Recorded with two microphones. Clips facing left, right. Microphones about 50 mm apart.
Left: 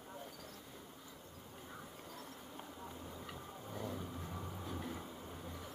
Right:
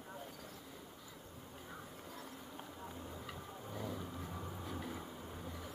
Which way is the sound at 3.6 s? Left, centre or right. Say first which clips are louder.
Even; centre.